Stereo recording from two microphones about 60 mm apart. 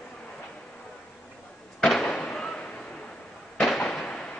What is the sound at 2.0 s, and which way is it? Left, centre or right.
Fireworks, centre.